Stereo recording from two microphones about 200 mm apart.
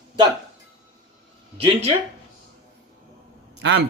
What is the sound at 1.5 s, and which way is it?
Speech, 30° right (ahead or behind).